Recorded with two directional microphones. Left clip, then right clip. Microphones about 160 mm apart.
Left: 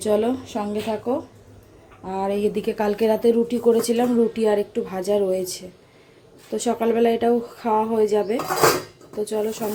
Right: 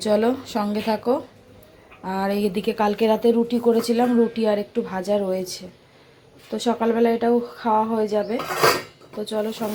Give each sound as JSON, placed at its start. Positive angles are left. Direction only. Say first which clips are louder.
{"t": 0.0, "sound": "a woman's voice", "louder": "right 1 dB", "side_deg": 5}